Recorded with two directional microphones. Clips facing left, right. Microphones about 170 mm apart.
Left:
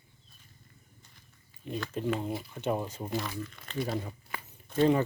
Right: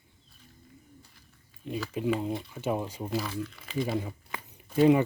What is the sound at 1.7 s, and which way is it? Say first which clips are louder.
Speech: right 2 dB; 5° right (ahead or behind).